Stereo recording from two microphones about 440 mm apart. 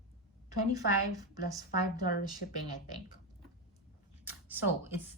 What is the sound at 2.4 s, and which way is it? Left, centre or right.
Speech, left.